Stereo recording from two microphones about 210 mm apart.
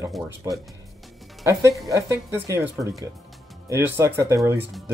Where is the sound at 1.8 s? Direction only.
15° right (ahead or behind).